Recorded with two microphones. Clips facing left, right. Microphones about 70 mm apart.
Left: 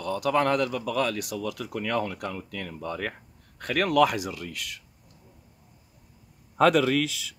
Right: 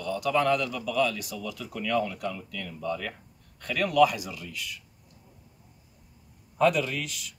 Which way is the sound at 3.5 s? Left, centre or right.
Left.